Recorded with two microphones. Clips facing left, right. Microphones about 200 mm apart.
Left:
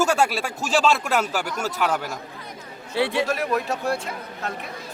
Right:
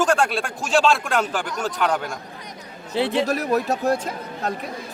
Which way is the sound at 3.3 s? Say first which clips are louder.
Right 3 dB; 40° right (ahead or behind).